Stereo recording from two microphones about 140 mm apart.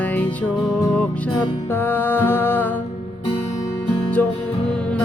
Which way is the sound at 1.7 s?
15° left (ahead or behind).